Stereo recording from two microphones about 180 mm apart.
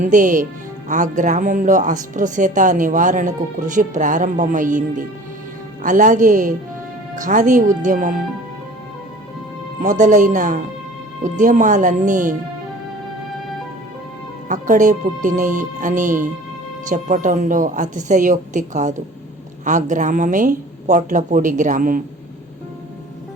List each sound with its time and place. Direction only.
0.0 s speech: 45° right (ahead or behind)
9.8 s speech: 45° right (ahead or behind)
14.4 s speech: 45° right (ahead or behind)